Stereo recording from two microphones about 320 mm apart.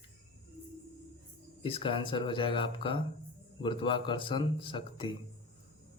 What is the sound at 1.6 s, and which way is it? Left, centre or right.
Speech, centre.